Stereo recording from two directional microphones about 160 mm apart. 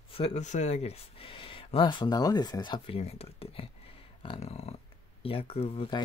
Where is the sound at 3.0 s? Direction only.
40° left (ahead or behind).